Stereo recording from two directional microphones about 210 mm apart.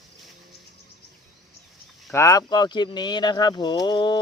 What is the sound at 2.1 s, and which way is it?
Speech, 15° left (ahead or behind).